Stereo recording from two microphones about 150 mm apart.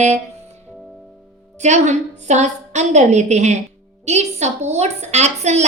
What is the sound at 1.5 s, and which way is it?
A woman's voice, 50° right (ahead or behind).